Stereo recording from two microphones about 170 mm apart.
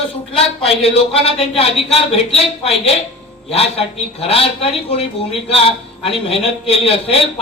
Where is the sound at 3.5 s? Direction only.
35° left (ahead or behind).